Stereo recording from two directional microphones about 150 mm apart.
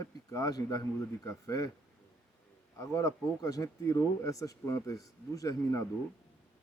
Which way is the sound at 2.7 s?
20° left (ahead or behind).